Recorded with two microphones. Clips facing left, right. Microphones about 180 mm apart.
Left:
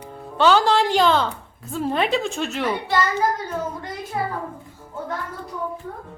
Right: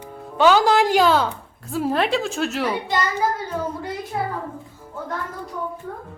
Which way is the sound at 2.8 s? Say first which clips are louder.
Left 1 dB; 20° right (ahead or behind).